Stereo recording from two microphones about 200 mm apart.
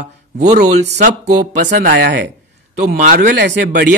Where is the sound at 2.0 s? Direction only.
55° right (ahead or behind).